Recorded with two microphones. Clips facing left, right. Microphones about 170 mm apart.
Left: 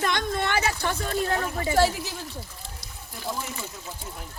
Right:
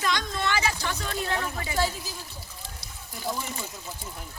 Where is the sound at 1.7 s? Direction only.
75° left (ahead or behind).